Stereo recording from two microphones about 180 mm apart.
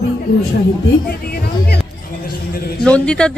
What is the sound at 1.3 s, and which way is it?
Music, 60° left (ahead or behind).